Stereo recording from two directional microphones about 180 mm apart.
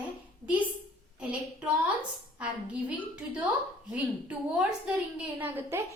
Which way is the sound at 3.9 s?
10° right (ahead or behind).